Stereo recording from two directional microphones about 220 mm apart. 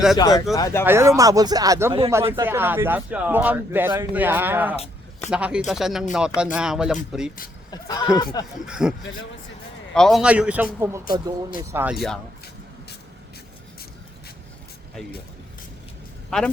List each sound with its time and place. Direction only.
0.2 s speech: 15° left (ahead or behind)
0.9 s speech: 10° right (ahead or behind)
7.7 s speech: 15° left (ahead or behind)
8.6 s speech: 5° right (ahead or behind)